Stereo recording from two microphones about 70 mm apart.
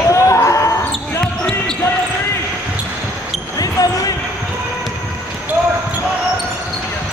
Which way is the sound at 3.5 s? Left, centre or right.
Left.